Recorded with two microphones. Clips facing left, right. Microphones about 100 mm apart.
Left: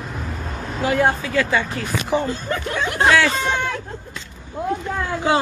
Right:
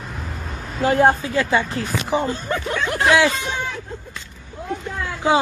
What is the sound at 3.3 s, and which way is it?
Speech, 55° left (ahead or behind).